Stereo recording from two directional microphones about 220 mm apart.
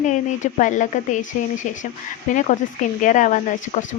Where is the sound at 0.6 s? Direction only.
35° left (ahead or behind).